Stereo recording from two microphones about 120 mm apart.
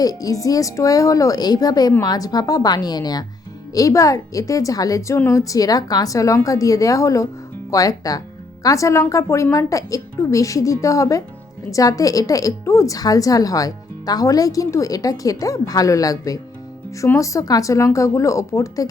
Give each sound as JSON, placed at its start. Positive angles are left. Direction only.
{"t": 0.0, "sound": "a woman's voice", "side_deg": 30}